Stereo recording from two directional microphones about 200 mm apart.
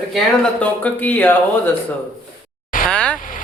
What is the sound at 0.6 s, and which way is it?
Speech, 10° left (ahead or behind).